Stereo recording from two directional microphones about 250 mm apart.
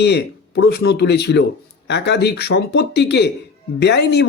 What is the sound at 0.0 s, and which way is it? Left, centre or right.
Speech, left.